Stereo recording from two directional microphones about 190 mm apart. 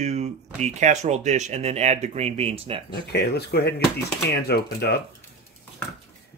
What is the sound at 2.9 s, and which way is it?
Speech, 60° left (ahead or behind).